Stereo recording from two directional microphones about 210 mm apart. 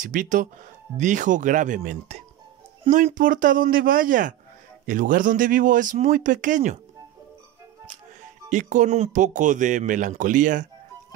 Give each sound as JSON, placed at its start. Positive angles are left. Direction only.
{"t": 0.0, "sound": "speech", "side_deg": -40}
{"t": 8.5, "sound": "speech", "side_deg": -35}